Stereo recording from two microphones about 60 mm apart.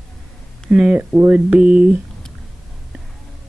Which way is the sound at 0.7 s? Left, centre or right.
Centre.